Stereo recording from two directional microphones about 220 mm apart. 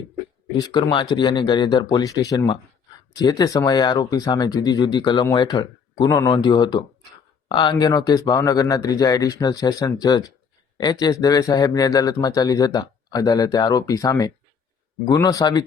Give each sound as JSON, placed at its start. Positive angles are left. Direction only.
{"t": 0.5, "sound": "speech", "side_deg": 20}